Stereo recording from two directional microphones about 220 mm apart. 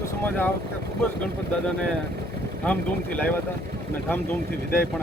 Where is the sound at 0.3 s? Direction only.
5° left (ahead or behind).